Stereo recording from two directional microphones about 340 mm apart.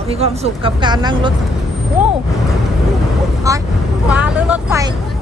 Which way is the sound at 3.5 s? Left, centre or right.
Centre.